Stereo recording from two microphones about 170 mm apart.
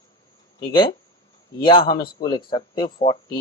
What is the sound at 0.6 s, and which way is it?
Speech, 25° left (ahead or behind).